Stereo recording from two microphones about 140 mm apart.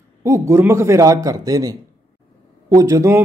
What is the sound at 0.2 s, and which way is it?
Speech, 20° right (ahead or behind).